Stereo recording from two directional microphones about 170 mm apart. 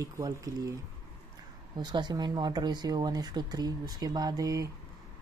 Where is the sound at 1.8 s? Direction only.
25° right (ahead or behind).